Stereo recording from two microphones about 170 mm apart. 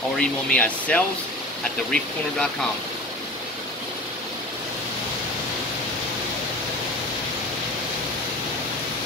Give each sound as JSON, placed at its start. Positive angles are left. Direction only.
{"t": 0.2, "sound": "speech", "side_deg": 5}